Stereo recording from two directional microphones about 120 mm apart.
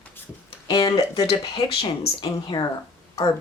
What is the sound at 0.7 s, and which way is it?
Speech, 35° left (ahead or behind).